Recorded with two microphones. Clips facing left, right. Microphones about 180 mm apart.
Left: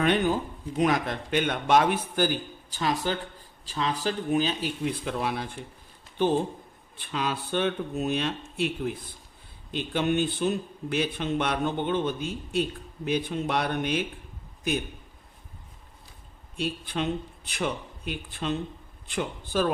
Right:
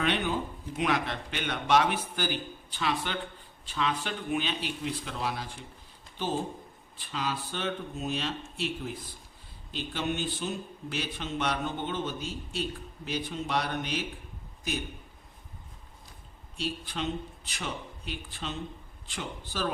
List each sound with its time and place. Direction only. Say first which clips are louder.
0.0 s a man's voice: left 5 dB; 45° left (ahead or behind)
4.9 s a man's voice: left 5 dB; 55° left (ahead or behind)
7.0 s a man's voice: left 4 dB; 60° left (ahead or behind)
16.6 s a man's voice: left 4 dB; 55° left (ahead or behind)